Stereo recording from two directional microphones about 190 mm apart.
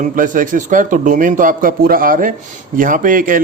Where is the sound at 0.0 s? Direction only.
45° right (ahead or behind).